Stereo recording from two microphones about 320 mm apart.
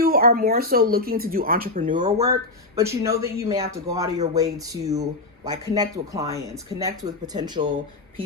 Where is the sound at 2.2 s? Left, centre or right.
Centre.